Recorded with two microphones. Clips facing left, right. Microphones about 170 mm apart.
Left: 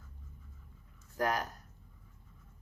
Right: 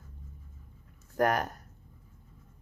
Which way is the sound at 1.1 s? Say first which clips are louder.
Right 6 dB; 60° right (ahead or behind).